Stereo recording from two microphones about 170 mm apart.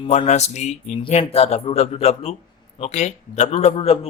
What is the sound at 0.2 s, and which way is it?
A man's voice, 40° left (ahead or behind).